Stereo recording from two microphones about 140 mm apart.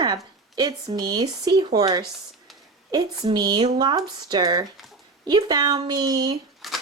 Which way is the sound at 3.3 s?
30° right (ahead or behind).